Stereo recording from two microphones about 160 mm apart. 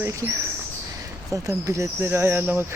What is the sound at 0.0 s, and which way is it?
Speech, 20° right (ahead or behind).